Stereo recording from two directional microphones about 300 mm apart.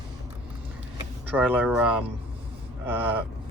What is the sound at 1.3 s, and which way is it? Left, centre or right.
Speech, centre.